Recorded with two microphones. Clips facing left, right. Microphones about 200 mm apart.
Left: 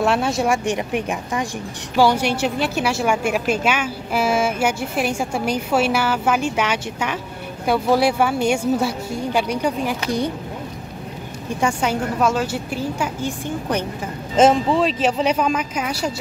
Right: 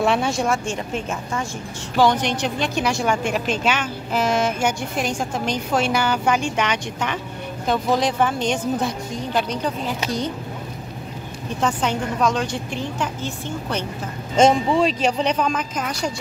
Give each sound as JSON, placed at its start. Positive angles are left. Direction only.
{"t": 0.0, "sound": "speech", "side_deg": 0}
{"t": 0.5, "sound": "a woman's voice", "side_deg": 15}
{"t": 11.6, "sound": "a woman's voice", "side_deg": 10}